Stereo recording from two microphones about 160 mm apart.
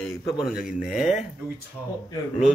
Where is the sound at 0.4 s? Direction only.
5° right (ahead or behind).